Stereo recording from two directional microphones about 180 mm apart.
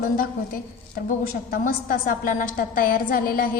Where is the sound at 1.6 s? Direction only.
50° left (ahead or behind).